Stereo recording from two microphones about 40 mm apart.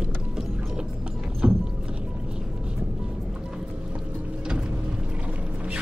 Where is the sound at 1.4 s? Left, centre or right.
Right.